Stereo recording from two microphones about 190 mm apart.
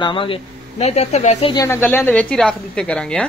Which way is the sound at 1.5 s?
15° left (ahead or behind).